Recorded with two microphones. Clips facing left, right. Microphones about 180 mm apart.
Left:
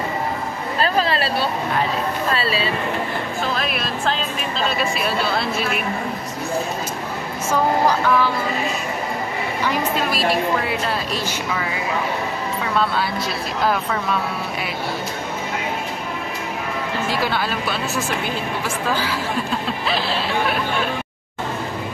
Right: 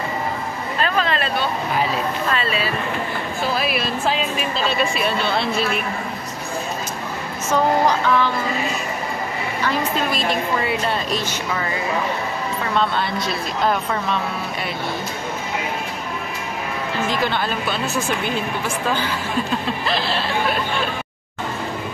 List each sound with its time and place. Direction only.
0.7 s a sound: 35° left (ahead or behind)
3.5 s a woman's voice: 5° right (ahead or behind)
7.8 s speech: 10° left (ahead or behind)
9.6 s a woman's voice: 10° left (ahead or behind)
12.7 s a woman's voice: 5° left (ahead or behind)
17.1 s a woman's voice: 5° left (ahead or behind)
19.9 s a woman's voice: 5° left (ahead or behind)